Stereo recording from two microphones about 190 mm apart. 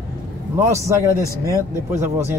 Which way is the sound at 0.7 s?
15° right (ahead or behind).